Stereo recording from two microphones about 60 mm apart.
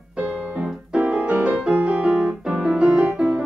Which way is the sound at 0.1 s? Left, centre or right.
Centre.